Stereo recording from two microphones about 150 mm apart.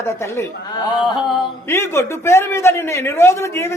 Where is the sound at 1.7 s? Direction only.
15° left (ahead or behind).